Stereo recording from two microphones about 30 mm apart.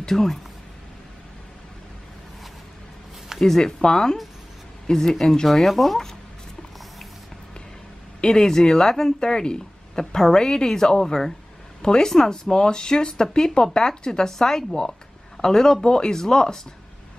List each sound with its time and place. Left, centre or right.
0.1 s speech: centre
3.3 s speech: centre
3.6 s speech: left
5.5 s speech: centre
8.4 s speech: centre